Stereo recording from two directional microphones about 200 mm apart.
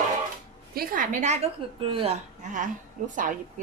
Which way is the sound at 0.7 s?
45° right (ahead or behind).